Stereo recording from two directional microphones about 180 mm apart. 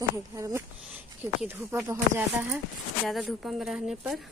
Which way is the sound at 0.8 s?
5° right (ahead or behind).